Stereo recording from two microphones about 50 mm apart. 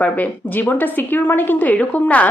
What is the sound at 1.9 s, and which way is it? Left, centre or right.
Speech, left.